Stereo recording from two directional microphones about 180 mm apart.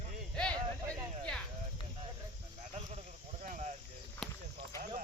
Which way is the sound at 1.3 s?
5° left (ahead or behind).